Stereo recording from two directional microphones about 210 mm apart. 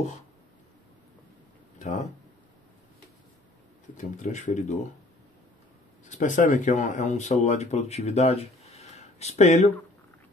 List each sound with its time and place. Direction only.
1.8 s speech: 35° left (ahead or behind)
3.9 s speech: 35° left (ahead or behind)
6.0 s speech: 35° left (ahead or behind)